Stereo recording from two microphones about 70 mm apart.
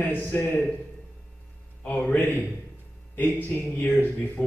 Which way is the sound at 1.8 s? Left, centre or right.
Centre.